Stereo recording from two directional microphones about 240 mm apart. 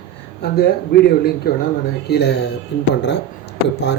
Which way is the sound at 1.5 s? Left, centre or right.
Left.